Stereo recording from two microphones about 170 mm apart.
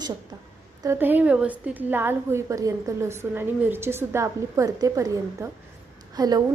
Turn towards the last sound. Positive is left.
turn(degrees=-20)  # may be behind; listen again after turning